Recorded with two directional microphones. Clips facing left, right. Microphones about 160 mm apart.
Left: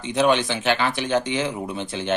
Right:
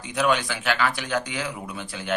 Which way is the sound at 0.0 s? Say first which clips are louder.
Left 4 dB; 25° left (ahead or behind).